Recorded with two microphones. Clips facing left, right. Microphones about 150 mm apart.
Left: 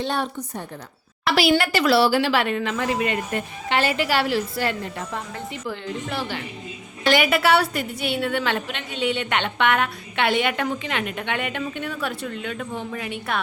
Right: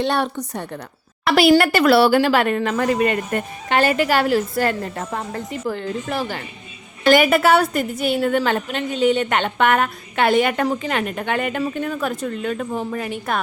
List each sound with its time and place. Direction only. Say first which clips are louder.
0.0 s a woman's voice: right 5 dB; 70° right (ahead or behind)
1.2 s a woman's voice: right 5 dB; 50° right (ahead or behind)